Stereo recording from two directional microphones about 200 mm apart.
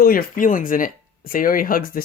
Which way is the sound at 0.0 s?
45° left (ahead or behind).